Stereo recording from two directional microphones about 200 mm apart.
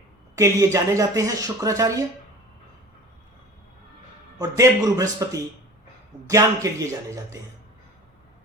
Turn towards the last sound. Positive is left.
turn(degrees=-15)  # may be behind; listen again after turning